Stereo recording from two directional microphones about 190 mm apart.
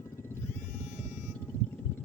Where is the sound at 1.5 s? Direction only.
10° left (ahead or behind).